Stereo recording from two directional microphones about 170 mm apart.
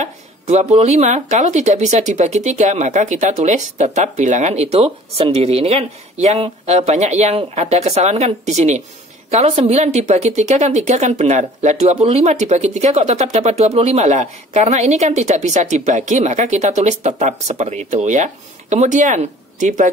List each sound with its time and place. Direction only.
0.0 s a woman's voice: 40° right (ahead or behind)